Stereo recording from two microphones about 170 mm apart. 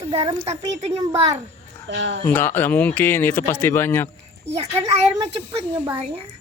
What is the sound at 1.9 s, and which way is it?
Speech, 90° right.